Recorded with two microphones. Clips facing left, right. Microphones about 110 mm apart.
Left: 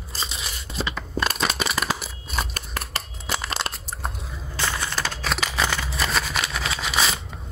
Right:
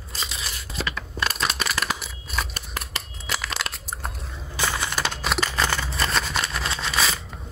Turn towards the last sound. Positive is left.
turn(degrees=0)  # may be behind; listen again after turning